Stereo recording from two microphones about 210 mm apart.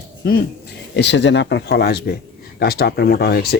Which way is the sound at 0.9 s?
55° left (ahead or behind).